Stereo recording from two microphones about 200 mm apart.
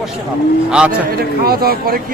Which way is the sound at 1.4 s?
50° right (ahead or behind).